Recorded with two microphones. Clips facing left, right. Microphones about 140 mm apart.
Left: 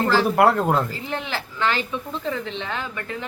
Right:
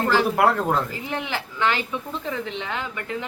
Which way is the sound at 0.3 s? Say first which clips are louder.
Left 2 dB; centre (ahead or behind).